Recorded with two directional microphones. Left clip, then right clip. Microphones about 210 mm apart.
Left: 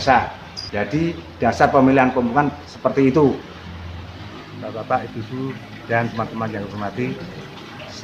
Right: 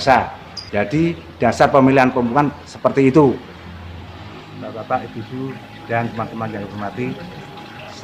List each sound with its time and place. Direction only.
0.1 s a man's voice: 55° right (ahead or behind)
4.9 s speech: centre (ahead or behind)